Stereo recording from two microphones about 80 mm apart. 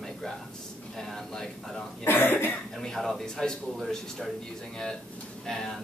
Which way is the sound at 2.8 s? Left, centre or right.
Centre.